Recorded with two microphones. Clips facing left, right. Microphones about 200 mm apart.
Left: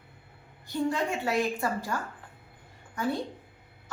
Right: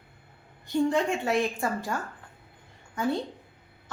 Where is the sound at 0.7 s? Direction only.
25° right (ahead or behind).